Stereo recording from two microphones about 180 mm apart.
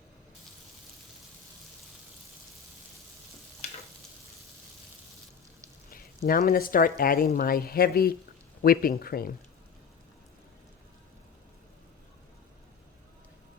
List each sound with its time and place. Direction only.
5.9 s speech: 55° left (ahead or behind)